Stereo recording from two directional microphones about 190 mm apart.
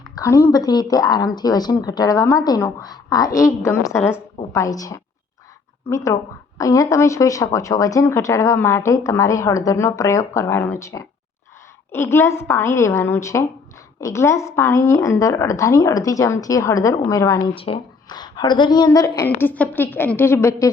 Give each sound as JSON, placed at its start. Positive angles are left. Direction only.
{"t": 0.2, "sound": "speech", "side_deg": 15}
{"t": 17.5, "sound": "speech", "side_deg": 30}